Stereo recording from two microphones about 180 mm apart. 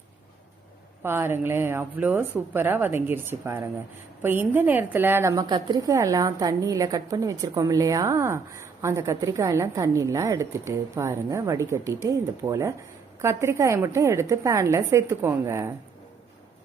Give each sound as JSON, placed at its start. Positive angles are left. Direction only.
{"t": 1.0, "sound": "a woman's voice", "side_deg": -15}